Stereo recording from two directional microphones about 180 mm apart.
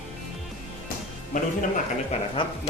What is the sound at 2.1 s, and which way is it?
Music, 35° left (ahead or behind).